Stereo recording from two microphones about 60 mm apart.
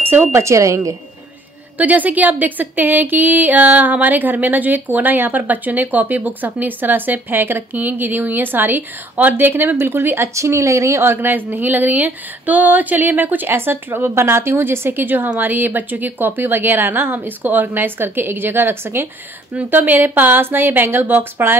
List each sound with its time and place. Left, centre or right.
0.1 s speech: right
0.4 s speech: right
1.8 s speech: right